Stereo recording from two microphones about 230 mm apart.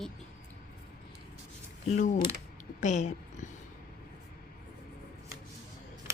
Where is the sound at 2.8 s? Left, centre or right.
Left.